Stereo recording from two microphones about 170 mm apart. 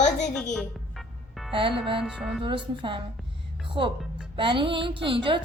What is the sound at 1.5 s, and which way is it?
Speech, 30° right (ahead or behind).